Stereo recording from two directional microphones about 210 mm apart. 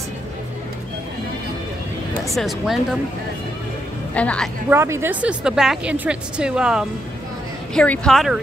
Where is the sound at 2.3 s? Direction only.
Centre (ahead or behind).